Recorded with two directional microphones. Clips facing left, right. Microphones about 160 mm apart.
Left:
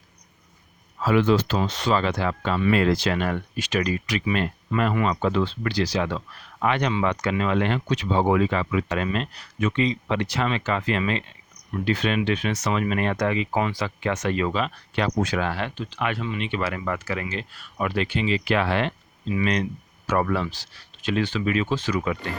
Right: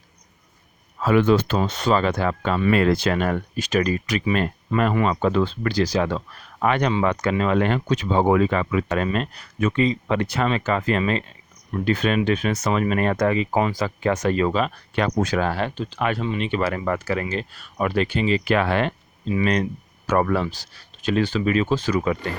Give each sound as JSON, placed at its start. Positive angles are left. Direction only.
{"t": 1.0, "sound": "speech", "side_deg": -50}